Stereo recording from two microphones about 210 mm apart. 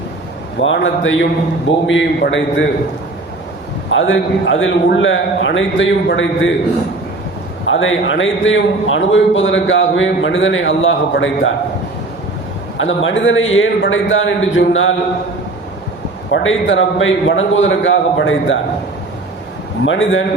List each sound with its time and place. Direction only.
0.6 s a man's voice: 65° left (ahead or behind)
3.9 s a man's voice: 65° left (ahead or behind)
7.7 s a man's voice: 65° left (ahead or behind)
12.7 s a man's voice: 65° left (ahead or behind)
16.3 s a man's voice: 65° left (ahead or behind)
19.8 s a man's voice: 65° left (ahead or behind)